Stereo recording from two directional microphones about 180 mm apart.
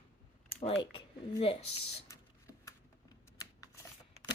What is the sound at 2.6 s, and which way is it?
Computer keyboard, 20° left (ahead or behind).